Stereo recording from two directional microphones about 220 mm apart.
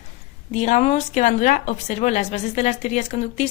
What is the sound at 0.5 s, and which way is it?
A woman's voice, 30° left (ahead or behind).